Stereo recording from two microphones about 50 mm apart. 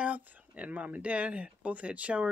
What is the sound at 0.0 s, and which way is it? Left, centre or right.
Speech, right.